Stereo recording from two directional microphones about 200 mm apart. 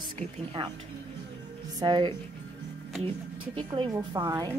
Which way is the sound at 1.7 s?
20° right (ahead or behind).